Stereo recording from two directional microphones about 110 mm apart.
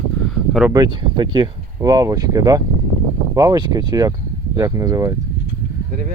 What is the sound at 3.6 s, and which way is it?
Speech, 40° right (ahead or behind).